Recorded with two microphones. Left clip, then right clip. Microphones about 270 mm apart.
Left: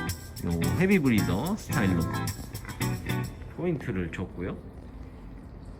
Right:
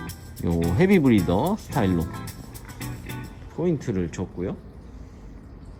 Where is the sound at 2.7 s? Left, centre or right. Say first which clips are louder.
Left 4 dB; centre.